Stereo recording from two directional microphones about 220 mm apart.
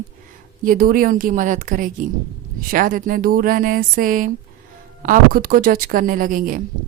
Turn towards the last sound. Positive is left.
turn(degrees=-40)  # may be behind; listen again after turning